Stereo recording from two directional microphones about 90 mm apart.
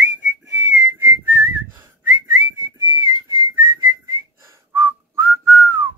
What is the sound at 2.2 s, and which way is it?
Whistling, 45° right (ahead or behind).